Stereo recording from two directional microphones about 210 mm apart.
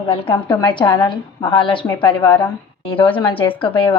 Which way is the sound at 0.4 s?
20° left (ahead or behind).